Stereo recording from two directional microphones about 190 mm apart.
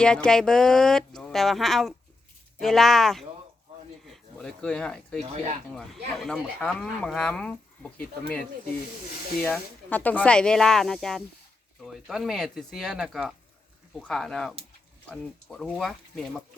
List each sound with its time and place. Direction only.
0.0 s speech: 5° left (ahead or behind)
5.2 s speech: 35° right (ahead or behind)
5.7 s speech: centre (ahead or behind)
9.4 s speech: 10° left (ahead or behind)